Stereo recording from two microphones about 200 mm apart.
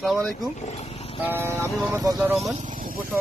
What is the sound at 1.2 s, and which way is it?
Speech, 10° right (ahead or behind).